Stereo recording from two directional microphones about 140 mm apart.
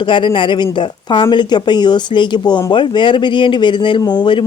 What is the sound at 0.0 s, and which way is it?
A woman's voice, 35° left (ahead or behind).